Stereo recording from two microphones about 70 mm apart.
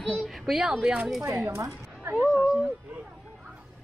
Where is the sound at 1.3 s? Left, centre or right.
Right.